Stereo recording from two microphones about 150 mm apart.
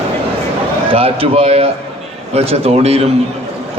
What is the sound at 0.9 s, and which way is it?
A man's voice, 40° right (ahead or behind).